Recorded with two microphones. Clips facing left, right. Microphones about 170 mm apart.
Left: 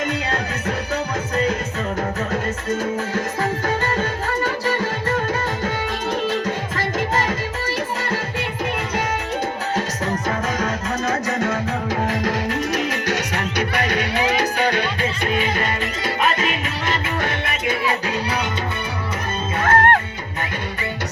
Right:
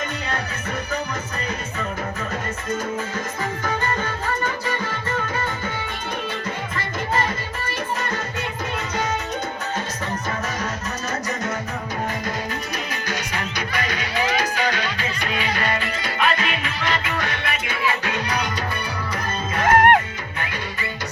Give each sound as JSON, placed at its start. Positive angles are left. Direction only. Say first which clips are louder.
{"t": 4.4, "sound": "music", "louder": "left 4 dB", "side_deg": 40}
{"t": 10.6, "sound": "music", "louder": "left 5 dB", "side_deg": 90}
{"t": 19.6, "sound": "music", "louder": "right 2 dB", "side_deg": -15}